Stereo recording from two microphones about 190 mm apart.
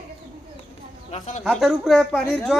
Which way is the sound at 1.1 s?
35° left (ahead or behind).